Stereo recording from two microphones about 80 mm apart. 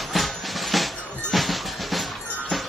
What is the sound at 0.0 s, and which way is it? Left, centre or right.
Music, centre.